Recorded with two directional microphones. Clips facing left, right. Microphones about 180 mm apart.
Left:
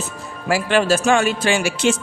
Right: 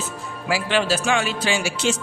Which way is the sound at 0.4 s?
50° left (ahead or behind).